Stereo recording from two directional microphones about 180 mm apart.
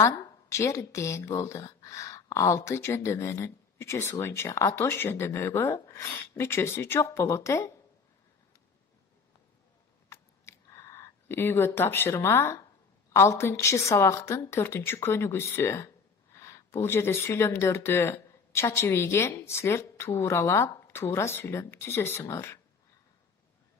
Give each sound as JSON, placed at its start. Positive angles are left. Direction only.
{"t": 0.0, "sound": "a woman's voice", "side_deg": 15}
{"t": 10.0, "sound": "a sound", "side_deg": 15}
{"t": 13.1, "sound": "a woman's voice", "side_deg": 15}